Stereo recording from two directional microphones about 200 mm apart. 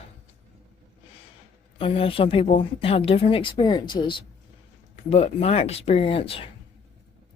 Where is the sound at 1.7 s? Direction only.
25° left (ahead or behind).